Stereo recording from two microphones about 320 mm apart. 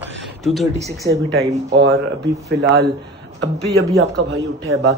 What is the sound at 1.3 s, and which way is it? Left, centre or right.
Speech, right.